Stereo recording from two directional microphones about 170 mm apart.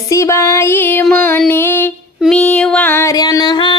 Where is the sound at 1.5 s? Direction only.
10° left (ahead or behind).